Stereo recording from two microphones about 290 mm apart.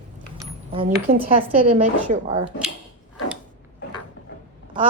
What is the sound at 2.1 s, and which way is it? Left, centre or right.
Speech, right.